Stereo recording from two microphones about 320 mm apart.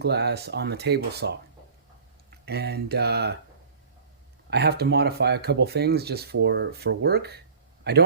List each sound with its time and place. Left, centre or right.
0.0 s speech: right
2.5 s speech: right
4.4 s speech: right